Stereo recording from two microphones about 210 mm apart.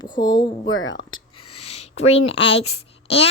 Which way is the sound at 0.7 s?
65° left (ahead or behind).